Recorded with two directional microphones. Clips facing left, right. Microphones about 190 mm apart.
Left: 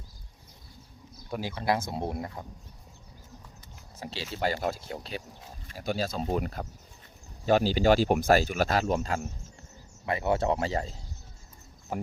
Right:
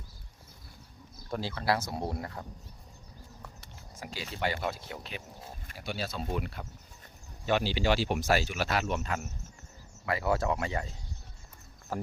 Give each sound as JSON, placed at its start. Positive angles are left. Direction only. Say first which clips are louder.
{"t": 1.3, "sound": "speech", "louder": "left 1 dB", "side_deg": 15}
{"t": 4.0, "sound": "speech", "louder": "left 3 dB", "side_deg": 30}
{"t": 11.9, "sound": "speech", "louder": "left 2 dB", "side_deg": 20}